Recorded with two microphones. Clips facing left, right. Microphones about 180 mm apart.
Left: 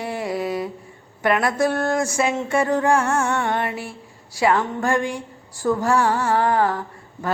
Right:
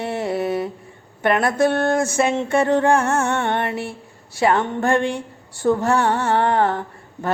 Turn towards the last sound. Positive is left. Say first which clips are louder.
# right 2 dB
turn(degrees=-25)  # may be behind; listen again after turning